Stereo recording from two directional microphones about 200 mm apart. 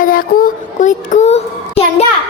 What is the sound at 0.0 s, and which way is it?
A woman's voice, 45° left (ahead or behind).